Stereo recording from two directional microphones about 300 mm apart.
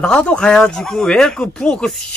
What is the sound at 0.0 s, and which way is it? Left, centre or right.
Speech, centre.